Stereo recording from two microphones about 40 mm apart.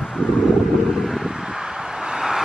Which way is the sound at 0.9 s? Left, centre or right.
Centre.